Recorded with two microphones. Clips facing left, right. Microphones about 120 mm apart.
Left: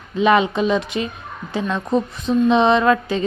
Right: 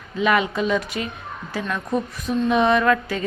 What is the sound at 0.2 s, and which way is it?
A woman's voice, 25° left (ahead or behind).